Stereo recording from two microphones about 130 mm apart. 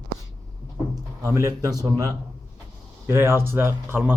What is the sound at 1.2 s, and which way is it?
Speech, 25° right (ahead or behind).